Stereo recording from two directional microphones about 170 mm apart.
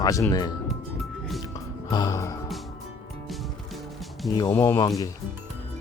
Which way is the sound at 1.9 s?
25° left (ahead or behind).